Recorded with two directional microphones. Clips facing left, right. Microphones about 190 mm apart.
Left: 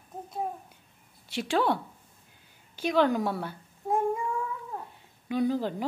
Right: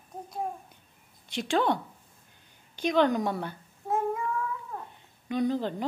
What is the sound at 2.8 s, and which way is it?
A woman's voice, 5° left (ahead or behind).